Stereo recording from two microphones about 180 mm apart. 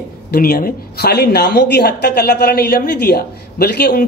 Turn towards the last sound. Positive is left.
turn(degrees=60)  # may be behind; listen again after turning